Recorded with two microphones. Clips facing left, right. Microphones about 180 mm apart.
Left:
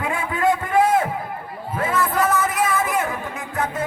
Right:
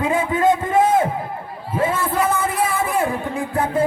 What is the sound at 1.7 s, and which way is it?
Music, 25° right (ahead or behind).